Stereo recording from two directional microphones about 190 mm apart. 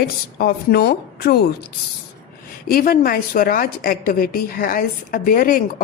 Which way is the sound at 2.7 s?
50° left (ahead or behind).